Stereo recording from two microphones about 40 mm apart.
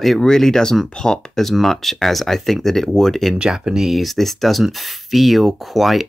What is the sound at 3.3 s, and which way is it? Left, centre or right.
Speech, centre.